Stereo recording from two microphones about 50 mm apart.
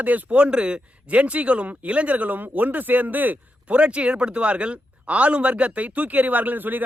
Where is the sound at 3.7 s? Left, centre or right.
Right.